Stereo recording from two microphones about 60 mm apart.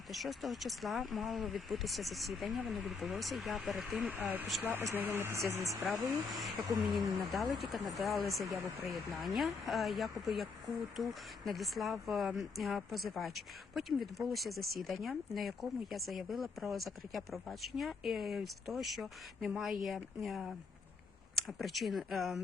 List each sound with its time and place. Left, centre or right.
0.1 s speech: centre
5.1 s speech: right
5.8 s speech: centre